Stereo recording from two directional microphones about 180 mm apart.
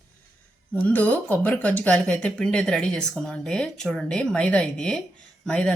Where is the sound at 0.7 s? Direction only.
10° left (ahead or behind).